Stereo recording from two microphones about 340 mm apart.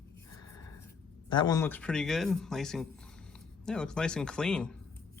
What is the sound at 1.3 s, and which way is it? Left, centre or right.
Speech, centre.